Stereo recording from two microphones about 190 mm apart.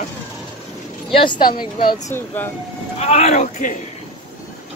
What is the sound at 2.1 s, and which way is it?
Speech, 10° left (ahead or behind).